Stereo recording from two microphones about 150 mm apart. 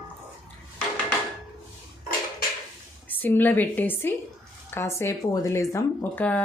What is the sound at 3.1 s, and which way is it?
Speech, 10° left (ahead or behind).